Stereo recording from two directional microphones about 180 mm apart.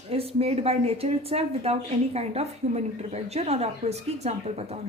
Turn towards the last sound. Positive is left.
turn(degrees=-35)  # may be behind; listen again after turning